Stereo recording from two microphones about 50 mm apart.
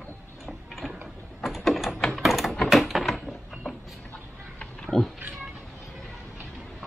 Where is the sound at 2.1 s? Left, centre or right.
Centre.